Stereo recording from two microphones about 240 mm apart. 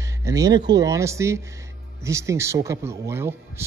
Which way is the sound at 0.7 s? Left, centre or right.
Centre.